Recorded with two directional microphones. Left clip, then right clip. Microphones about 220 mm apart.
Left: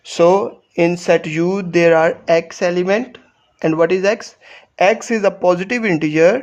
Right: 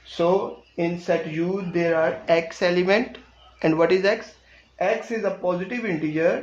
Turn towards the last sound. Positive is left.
turn(degrees=40)  # may be behind; listen again after turning